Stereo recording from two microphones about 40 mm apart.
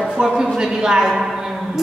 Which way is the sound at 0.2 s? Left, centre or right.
Centre.